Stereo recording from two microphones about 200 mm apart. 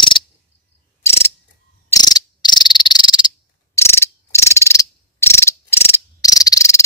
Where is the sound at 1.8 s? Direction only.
20° left (ahead or behind).